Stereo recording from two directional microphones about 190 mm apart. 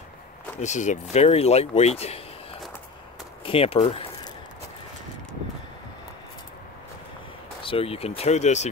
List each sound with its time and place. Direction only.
0.6 s speech: 40° left (ahead or behind)
3.4 s speech: 30° left (ahead or behind)
7.6 s speech: 30° left (ahead or behind)